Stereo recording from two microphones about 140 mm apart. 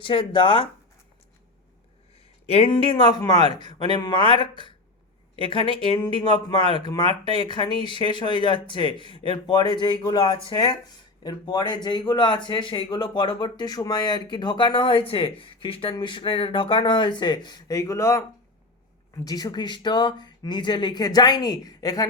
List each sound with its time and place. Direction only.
0.0 s a man's voice: 35° left (ahead or behind)
2.5 s a man's voice: 40° left (ahead or behind); by 22.0 s 25° left (ahead or behind)